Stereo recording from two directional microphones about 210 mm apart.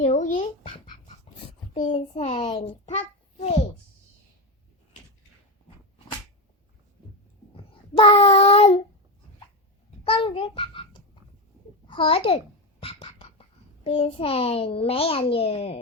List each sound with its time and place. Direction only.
0.0 s a sound: 35° left (ahead or behind)
1.9 s a child's voice: 30° left (ahead or behind)
7.5 s child singing: 25° left (ahead or behind)
10.0 s a child's voice: 25° left (ahead or behind)
11.9 s a child's voice: 25° left (ahead or behind)
12.8 s music: 25° left (ahead or behind)
13.8 s a child's voice: 25° left (ahead or behind)